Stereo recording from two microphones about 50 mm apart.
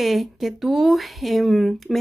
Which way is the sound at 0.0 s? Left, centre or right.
Centre.